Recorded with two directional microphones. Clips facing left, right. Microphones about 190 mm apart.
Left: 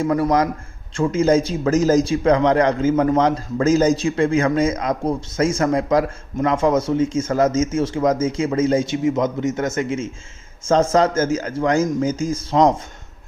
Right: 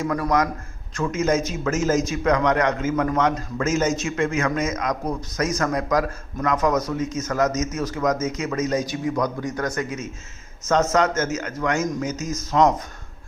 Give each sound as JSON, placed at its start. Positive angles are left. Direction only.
{"t": 0.0, "sound": "a man's voice", "side_deg": 30}